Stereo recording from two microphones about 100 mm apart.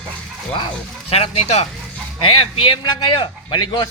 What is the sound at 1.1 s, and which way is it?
Speech, 90° left.